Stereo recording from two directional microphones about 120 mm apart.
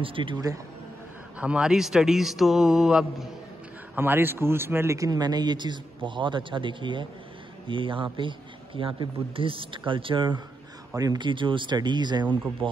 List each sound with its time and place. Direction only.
0.0 s a man's voice: 45° right (ahead or behind)
1.4 s a man's voice: 10° right (ahead or behind)
3.9 s a man's voice: 15° right (ahead or behind); by 12.6 s 40° right (ahead or behind)